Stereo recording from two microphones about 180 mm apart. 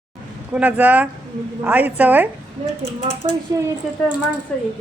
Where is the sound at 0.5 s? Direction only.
10° right (ahead or behind).